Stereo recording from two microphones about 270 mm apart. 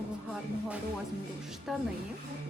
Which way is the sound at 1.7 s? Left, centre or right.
Centre.